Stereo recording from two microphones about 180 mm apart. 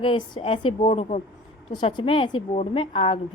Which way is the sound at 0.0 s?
30° left (ahead or behind).